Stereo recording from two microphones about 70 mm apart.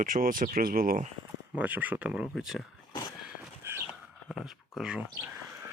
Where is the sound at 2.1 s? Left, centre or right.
Centre.